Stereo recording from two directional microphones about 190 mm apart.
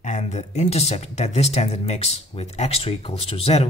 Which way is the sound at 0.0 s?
35° left (ahead or behind).